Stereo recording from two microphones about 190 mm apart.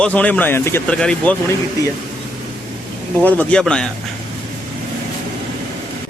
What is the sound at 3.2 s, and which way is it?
Speech, 5° left (ahead or behind).